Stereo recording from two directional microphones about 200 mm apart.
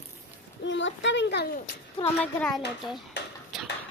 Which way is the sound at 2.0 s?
5° left (ahead or behind).